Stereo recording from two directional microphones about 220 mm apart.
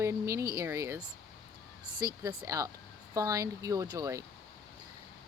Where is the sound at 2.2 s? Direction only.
15° right (ahead or behind).